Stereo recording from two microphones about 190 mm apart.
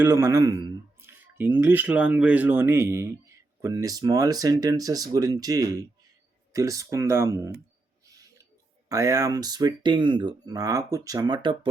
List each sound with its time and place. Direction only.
0.0 s speech: 15° right (ahead or behind)
8.0 s a sound: 20° right (ahead or behind)
8.9 s speech: 15° right (ahead or behind)